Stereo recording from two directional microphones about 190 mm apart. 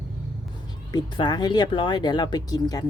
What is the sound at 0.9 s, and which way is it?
Speech, 25° left (ahead or behind).